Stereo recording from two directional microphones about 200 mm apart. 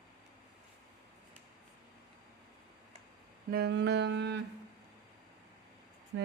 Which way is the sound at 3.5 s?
55° right (ahead or behind).